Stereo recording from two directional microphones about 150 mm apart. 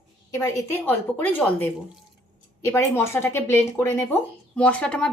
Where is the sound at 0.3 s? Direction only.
20° left (ahead or behind).